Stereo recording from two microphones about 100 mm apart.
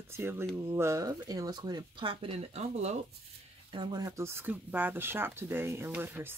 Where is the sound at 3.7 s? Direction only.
50° right (ahead or behind).